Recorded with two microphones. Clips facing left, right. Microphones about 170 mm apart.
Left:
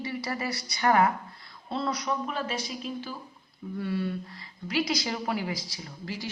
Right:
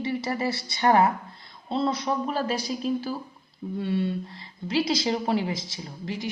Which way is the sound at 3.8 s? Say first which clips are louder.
Right 4 dB; 25° right (ahead or behind).